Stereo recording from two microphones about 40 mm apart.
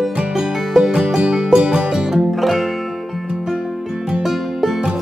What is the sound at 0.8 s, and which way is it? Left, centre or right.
Music, centre.